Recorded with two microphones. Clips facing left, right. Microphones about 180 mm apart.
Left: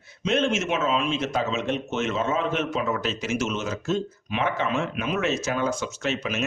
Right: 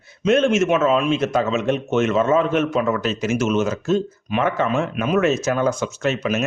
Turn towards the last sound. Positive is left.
turn(degrees=-45)  # may be behind; listen again after turning